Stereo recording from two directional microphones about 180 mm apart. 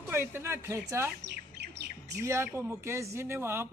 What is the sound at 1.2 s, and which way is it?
Bird, 70° right (ahead or behind).